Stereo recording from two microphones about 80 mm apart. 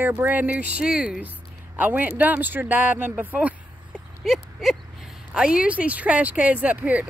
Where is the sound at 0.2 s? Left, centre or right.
Right.